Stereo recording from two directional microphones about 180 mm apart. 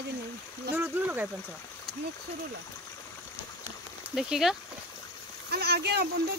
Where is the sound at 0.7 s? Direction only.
10° right (ahead or behind).